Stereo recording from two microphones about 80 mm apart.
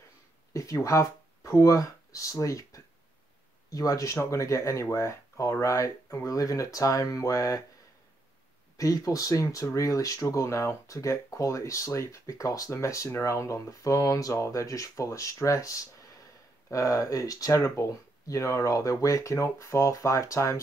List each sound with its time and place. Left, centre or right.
0.5 s speech: left
8.7 s speech: left